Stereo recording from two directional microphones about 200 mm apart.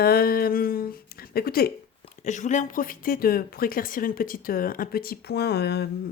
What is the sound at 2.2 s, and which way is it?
Speech, 35° left (ahead or behind).